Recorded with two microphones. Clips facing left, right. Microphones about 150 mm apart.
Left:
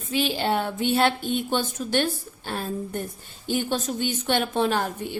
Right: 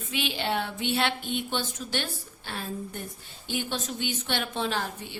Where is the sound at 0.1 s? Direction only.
40° left (ahead or behind).